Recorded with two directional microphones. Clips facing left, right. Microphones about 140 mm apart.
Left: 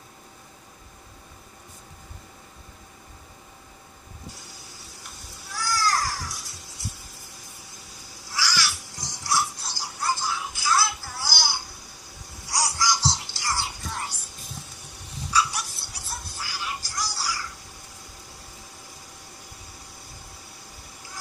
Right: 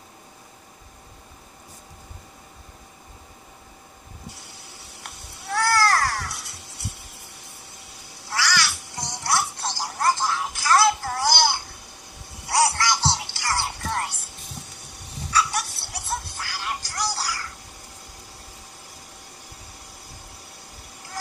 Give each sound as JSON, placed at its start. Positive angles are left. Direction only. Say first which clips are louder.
{"t": 5.0, "sound": "a sound", "louder": "right 10 dB", "side_deg": -65}
{"t": 8.1, "sound": "cat", "louder": "right 4 dB", "side_deg": -65}
{"t": 12.4, "sound": "music", "louder": "right 5 dB", "side_deg": -65}
{"t": 15.3, "sound": "music", "louder": "right 2 dB", "side_deg": -65}